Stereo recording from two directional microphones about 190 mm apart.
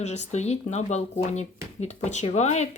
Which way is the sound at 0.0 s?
35° left (ahead or behind).